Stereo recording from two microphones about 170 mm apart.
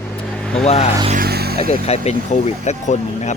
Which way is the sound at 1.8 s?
40° left (ahead or behind).